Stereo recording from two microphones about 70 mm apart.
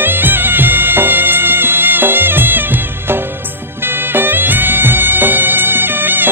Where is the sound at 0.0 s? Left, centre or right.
Right.